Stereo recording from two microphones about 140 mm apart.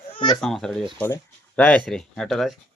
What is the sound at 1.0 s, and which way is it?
Speech, 15° left (ahead or behind).